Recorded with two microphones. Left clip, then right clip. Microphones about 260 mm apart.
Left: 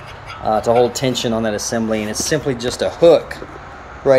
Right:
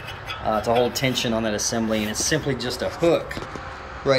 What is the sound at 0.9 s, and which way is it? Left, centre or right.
Speech, left.